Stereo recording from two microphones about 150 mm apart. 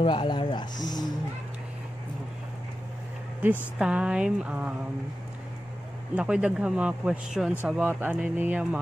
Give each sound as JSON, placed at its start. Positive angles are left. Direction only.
{"t": 0.0, "sound": "speech", "side_deg": 35}
{"t": 3.7, "sound": "speech", "side_deg": -5}
{"t": 6.1, "sound": "speech", "side_deg": -5}